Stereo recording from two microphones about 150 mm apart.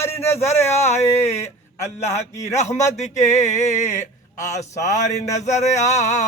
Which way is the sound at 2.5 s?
50° left (ahead or behind).